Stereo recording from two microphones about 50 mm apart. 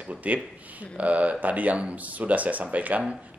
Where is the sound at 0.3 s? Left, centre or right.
Right.